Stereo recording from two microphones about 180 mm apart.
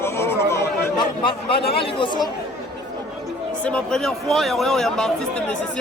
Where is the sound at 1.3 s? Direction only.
30° left (ahead or behind).